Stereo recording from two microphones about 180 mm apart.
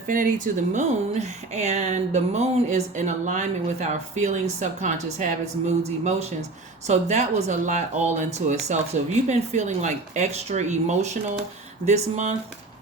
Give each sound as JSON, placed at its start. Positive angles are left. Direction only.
{"t": 0.1, "sound": "speech", "side_deg": -45}